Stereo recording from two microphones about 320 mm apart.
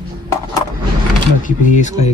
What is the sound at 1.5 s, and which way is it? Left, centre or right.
Speech, left.